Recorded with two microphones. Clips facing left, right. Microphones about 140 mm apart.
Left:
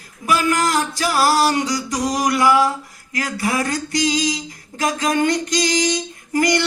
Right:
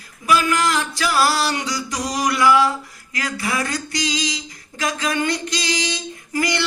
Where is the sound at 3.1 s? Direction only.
40° left (ahead or behind).